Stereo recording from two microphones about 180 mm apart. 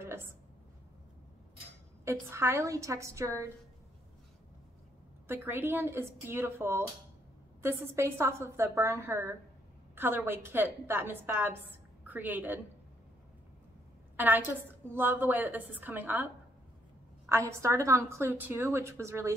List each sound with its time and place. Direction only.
0.0 s a sound: 15° right (ahead or behind)
2.0 s a woman's voice: 15° right (ahead or behind)
5.3 s a woman's voice: 10° right (ahead or behind)
14.1 s a woman's voice: 10° right (ahead or behind)
17.3 s a woman's voice: 15° right (ahead or behind)